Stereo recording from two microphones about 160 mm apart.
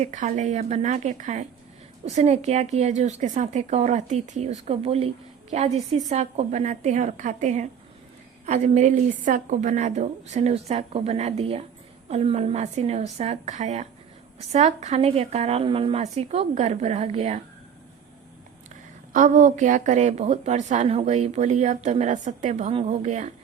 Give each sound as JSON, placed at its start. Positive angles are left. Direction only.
{"t": 0.0, "sound": "a woman's voice", "side_deg": -50}
{"t": 19.1, "sound": "a woman's voice", "side_deg": -50}